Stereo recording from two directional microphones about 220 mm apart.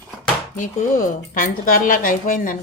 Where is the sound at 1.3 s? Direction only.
40° left (ahead or behind).